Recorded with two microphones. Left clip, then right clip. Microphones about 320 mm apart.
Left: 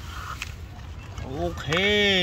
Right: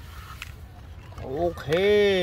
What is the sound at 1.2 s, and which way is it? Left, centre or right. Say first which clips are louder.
Speech: right 3 dB; centre.